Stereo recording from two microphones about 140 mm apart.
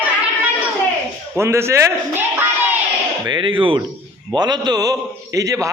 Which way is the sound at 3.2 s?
35° right (ahead or behind).